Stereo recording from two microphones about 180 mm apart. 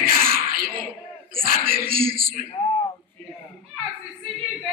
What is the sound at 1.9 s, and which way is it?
Speech, 55° right (ahead or behind).